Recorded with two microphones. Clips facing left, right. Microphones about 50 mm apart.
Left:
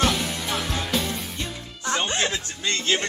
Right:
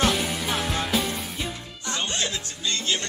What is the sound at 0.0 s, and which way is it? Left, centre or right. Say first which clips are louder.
Music: even; centre.